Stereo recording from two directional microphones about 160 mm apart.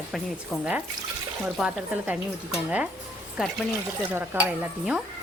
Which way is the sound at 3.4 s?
5° right (ahead or behind).